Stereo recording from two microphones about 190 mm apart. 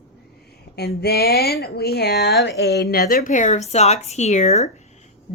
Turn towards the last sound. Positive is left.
turn(degrees=35)  # may be behind; listen again after turning